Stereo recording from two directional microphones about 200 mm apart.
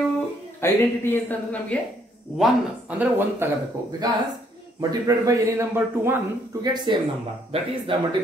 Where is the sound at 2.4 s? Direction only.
5° right (ahead or behind).